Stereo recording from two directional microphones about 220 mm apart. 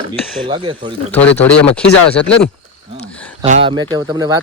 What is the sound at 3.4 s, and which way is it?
Speech, 35° right (ahead or behind).